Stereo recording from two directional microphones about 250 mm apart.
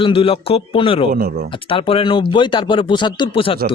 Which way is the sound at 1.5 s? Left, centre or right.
Left.